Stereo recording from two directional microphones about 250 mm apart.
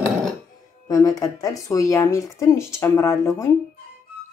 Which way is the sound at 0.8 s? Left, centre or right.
Centre.